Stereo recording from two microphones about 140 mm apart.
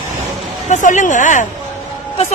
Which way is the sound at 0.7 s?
65° left (ahead or behind).